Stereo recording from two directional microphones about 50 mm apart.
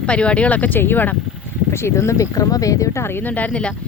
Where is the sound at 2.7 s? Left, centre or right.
Left.